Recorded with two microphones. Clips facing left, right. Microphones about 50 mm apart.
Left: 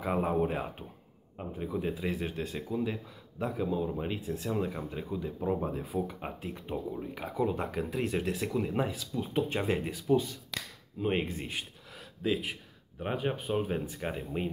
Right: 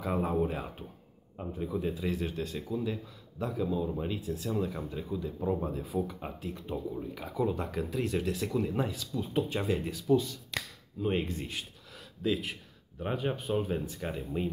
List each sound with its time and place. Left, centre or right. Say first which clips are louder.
0.0 s speech: left 1 dB; left
5.9 s speech: right 2 dB; centre
6.2 s speech: even; left
8.5 s speech: even; centre